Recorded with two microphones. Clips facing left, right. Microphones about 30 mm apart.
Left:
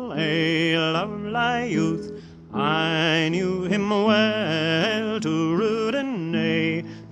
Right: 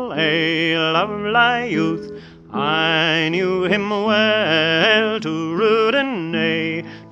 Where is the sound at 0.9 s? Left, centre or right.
Right.